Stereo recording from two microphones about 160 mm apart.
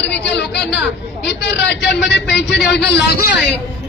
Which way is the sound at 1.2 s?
90° left.